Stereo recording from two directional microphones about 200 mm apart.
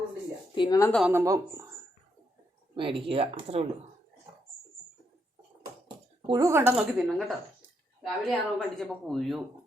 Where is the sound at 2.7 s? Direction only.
25° right (ahead or behind).